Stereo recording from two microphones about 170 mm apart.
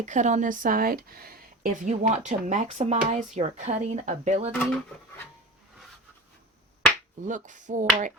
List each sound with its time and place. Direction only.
0.0 s speech: 45° right (ahead or behind)
4.6 s speech: 5° left (ahead or behind)
7.3 s speech: 50° right (ahead or behind)